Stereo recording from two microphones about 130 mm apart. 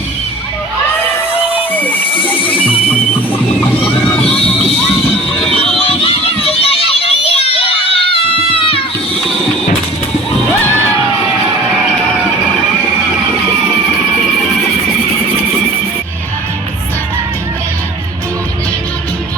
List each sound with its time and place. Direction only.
1.3 s music: 45° left (ahead or behind)
1.7 s a sound: 15° left (ahead or behind)
5.8 s children playing: 45° left (ahead or behind)